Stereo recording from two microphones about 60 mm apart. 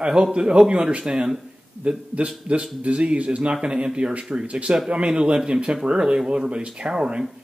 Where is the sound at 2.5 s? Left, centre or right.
Centre.